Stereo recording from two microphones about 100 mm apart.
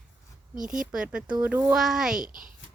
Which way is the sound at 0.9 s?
10° right (ahead or behind).